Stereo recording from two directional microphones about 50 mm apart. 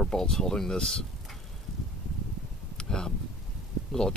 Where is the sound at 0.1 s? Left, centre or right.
Centre.